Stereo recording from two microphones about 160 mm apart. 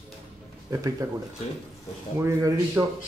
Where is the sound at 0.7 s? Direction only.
20° right (ahead or behind).